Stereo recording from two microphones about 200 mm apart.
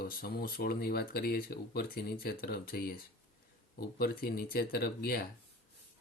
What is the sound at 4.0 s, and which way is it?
Speech, 50° left (ahead or behind).